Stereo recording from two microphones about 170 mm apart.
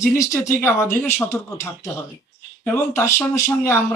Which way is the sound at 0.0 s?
15° left (ahead or behind).